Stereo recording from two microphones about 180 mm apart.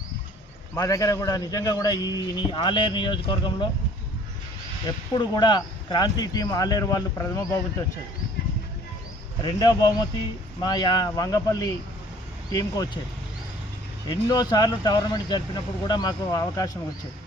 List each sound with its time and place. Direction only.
0.7 s a man's voice: 20° left (ahead or behind)
4.9 s a man's voice: 25° left (ahead or behind)
9.4 s a man's voice: 20° left (ahead or behind)
14.1 s a man's voice: 20° left (ahead or behind)